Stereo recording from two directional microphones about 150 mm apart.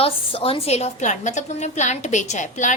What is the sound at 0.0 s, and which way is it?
A woman's voice, 40° left (ahead or behind).